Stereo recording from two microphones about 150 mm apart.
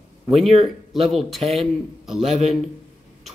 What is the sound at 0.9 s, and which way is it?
Speech, centre (ahead or behind).